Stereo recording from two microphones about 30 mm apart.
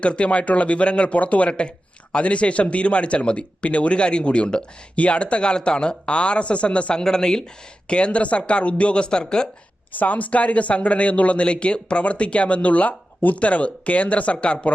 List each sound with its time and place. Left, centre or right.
0.0 s speech: left
1.2 s speech: left
1.5 s a man's voice: left
6.9 s speech: left
7.9 s a man's voice: left
9.9 s speech: left
13.8 s speech: left
14.4 s a man's voice: left